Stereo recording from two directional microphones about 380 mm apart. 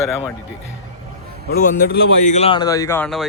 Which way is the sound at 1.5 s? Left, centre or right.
Left.